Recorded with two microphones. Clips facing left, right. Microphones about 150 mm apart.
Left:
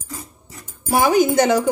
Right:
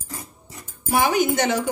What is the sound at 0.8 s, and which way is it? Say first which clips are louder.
Speech: left 4 dB; 40° left (ahead or behind).